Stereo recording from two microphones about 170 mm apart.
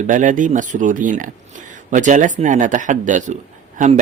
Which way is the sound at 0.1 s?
50° right (ahead or behind).